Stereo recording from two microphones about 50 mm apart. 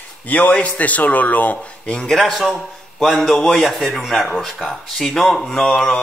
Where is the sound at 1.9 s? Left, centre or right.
Centre.